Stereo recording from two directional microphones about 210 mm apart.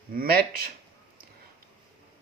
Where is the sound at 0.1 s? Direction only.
45° right (ahead or behind).